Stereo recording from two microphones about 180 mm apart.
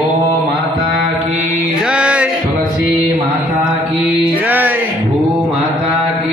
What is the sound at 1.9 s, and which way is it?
Music, 5° right (ahead or behind).